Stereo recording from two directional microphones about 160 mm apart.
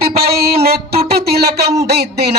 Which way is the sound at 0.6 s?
75° right (ahead or behind).